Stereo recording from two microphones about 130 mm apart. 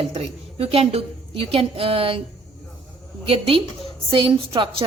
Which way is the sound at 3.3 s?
45° right (ahead or behind).